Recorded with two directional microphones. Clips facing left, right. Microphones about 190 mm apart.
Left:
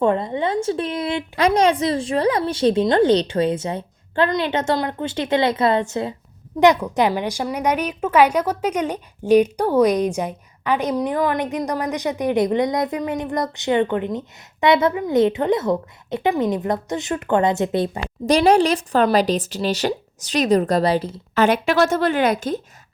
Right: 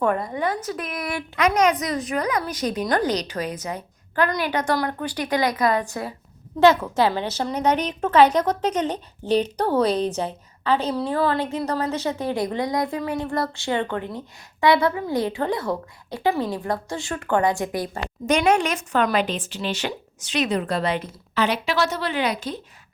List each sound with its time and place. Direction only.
0.0 s a woman's voice: 25° left (ahead or behind)
21.4 s a woman's voice: 50° left (ahead or behind)